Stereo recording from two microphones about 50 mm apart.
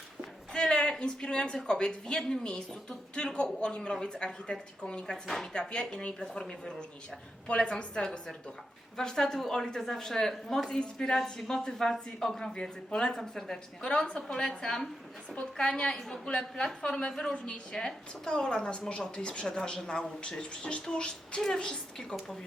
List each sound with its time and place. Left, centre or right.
0.5 s a sound: centre
1.6 s a woman's voice: centre
5.2 s speech: centre
5.5 s a woman's voice: centre